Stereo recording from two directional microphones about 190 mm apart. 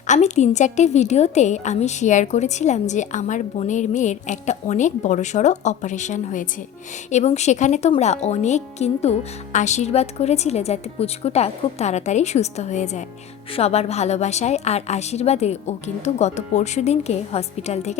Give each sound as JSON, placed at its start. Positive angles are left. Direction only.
{"t": 0.1, "sound": "a woman's voice", "side_deg": 40}